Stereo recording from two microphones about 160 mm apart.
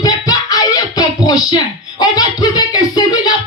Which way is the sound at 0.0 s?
25° left (ahead or behind).